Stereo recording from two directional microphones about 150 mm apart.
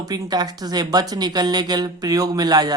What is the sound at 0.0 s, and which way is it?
Speech, 25° right (ahead or behind).